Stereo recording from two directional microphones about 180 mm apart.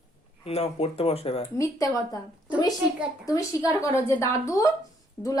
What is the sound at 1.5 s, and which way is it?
Speech, 20° left (ahead or behind).